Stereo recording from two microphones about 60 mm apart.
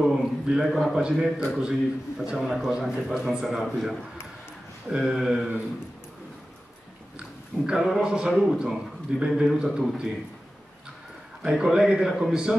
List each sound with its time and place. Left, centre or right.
0.0 s a man's voice: centre
7.2 s a sound: centre
8.0 s a man's voice: centre
11.4 s a man's voice: centre